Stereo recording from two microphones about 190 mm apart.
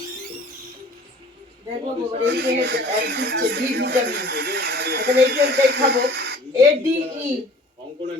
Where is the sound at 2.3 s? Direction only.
60° right (ahead or behind).